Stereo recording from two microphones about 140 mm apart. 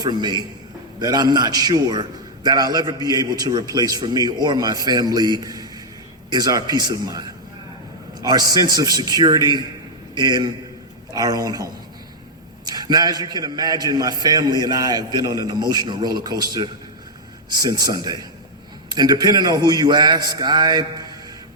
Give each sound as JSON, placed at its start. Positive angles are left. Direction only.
{"t": 0.0, "sound": "a man's voice", "side_deg": -30}